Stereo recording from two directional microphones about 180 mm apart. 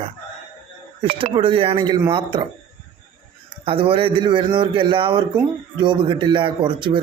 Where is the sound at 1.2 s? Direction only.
30° right (ahead or behind).